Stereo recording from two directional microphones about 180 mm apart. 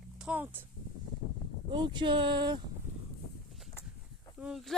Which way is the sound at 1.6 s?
25° right (ahead or behind).